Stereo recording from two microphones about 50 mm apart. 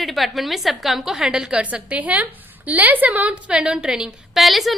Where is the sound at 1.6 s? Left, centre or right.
Right.